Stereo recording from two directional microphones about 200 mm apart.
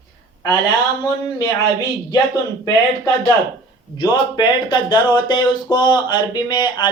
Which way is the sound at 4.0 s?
20° left (ahead or behind).